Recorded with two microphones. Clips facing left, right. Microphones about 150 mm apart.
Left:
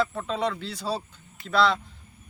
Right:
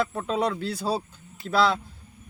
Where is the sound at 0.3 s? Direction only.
10° right (ahead or behind).